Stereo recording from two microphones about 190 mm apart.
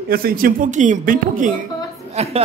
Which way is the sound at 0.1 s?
50° right (ahead or behind).